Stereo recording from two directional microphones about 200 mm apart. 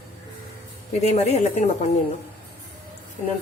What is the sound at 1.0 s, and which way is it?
Speech, 35° left (ahead or behind).